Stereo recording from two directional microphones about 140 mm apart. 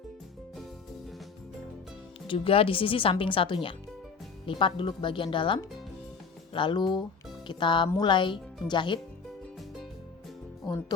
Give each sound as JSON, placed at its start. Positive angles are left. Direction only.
{"t": 2.2, "sound": "speech", "side_deg": 40}
{"t": 10.7, "sound": "speech", "side_deg": 30}